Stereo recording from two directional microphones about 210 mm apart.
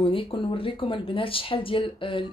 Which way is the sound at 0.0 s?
25° left (ahead or behind).